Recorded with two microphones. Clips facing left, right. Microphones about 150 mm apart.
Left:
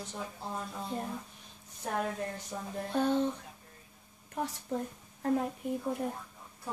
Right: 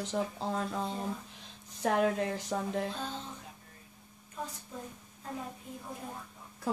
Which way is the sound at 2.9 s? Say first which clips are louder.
Left 11 dB; 65° left (ahead or behind).